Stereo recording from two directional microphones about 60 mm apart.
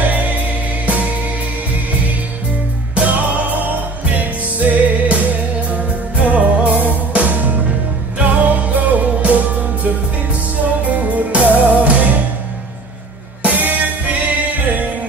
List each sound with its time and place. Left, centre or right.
0.0 s music: right
2.9 s music: right
4.6 s music: right
10.6 s music: right
13.4 s music: right